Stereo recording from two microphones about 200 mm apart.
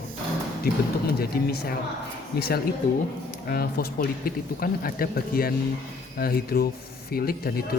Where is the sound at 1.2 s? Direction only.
50° left (ahead or behind).